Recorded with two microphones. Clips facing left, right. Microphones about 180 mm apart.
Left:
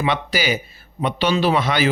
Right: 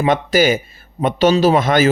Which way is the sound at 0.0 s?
45° right (ahead or behind).